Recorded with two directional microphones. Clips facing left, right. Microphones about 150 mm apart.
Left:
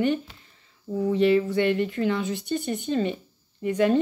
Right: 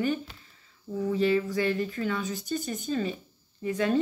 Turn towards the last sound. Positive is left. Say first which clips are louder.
# left 5 dB
turn(degrees=30)  # may be behind; listen again after turning